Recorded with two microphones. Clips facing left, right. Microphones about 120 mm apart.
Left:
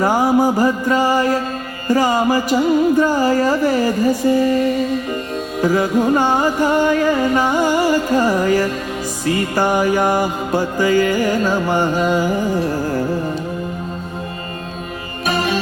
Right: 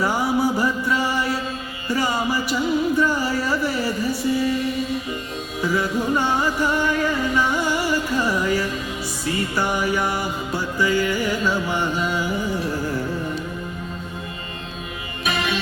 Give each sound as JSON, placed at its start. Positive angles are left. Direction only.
{"t": 0.0, "sound": "music", "side_deg": 45}
{"t": 15.3, "sound": "music", "side_deg": 40}